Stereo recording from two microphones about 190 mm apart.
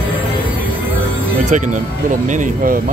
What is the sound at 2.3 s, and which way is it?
Speech, 40° right (ahead or behind).